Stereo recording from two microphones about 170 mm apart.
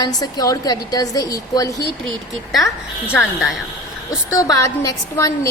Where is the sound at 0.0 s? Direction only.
25° left (ahead or behind).